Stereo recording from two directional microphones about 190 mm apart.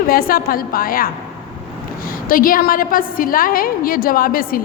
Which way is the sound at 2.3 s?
50° left (ahead or behind).